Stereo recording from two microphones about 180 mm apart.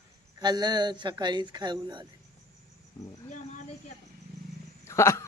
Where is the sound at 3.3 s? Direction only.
45° left (ahead or behind).